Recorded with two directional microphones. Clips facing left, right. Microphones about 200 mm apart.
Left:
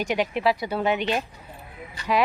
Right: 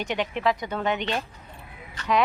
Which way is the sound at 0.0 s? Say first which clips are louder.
Left 2 dB; 10° left (ahead or behind).